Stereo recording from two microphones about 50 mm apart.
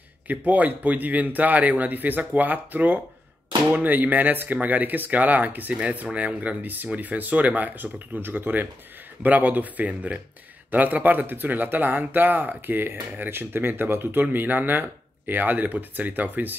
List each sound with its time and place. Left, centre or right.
0.3 s speech: right